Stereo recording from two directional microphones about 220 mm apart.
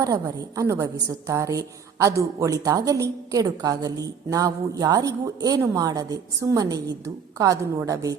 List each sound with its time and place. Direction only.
0.0 s a woman's voice: 15° right (ahead or behind)